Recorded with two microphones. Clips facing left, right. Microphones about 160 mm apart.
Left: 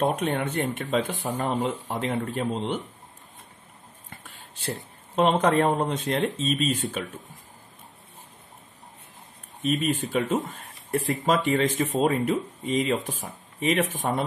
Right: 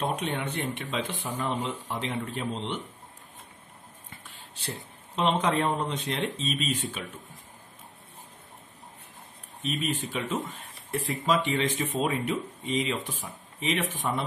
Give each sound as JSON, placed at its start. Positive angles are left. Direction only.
{"t": 0.1, "sound": "speech", "side_deg": 50}
{"t": 4.2, "sound": "speech", "side_deg": 50}
{"t": 9.7, "sound": "speech", "side_deg": 45}